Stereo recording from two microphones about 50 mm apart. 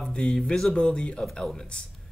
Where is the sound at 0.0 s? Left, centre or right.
Centre.